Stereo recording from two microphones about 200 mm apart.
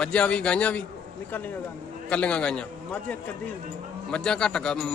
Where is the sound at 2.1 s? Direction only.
5° left (ahead or behind).